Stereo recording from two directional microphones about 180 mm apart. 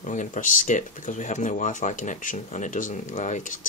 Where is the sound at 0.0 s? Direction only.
45° left (ahead or behind).